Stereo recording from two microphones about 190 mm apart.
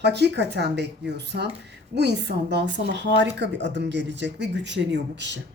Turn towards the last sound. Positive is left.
turn(degrees=-70)  # may be behind; listen again after turning